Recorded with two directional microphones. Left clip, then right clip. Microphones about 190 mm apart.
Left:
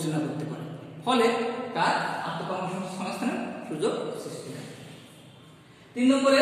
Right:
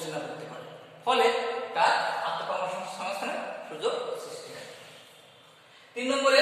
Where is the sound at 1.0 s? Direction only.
Centre (ahead or behind).